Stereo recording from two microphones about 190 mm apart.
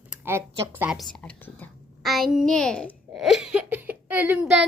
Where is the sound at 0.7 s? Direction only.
5° right (ahead or behind).